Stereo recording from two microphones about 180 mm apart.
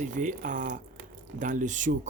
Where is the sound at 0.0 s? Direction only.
45° right (ahead or behind).